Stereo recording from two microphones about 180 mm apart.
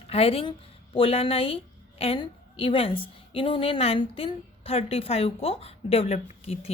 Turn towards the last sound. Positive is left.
turn(degrees=35)  # may be behind; listen again after turning